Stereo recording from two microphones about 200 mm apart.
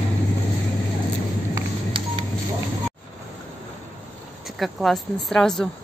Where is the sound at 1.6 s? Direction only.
20° right (ahead or behind).